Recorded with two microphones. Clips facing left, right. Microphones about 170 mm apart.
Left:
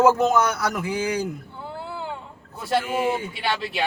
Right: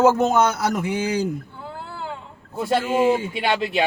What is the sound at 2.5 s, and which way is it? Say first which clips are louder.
Speech: right 3 dB; 25° right (ahead or behind).